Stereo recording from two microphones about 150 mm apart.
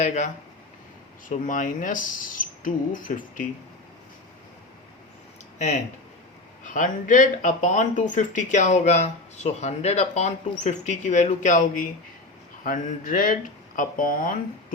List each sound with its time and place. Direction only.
0.0 s speech: 50° left (ahead or behind)
1.3 s speech: 60° left (ahead or behind)
5.5 s speech: 50° left (ahead or behind)